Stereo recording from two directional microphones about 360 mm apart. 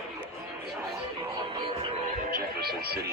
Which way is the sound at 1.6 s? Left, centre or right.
Centre.